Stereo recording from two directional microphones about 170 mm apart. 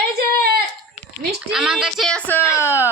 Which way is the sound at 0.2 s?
65° right (ahead or behind).